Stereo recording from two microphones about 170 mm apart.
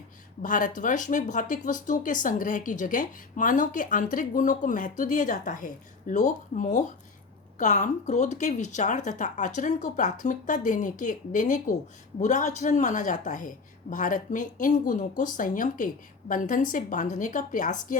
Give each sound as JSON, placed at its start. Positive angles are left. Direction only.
{"t": 0.4, "sound": "speech", "side_deg": 50}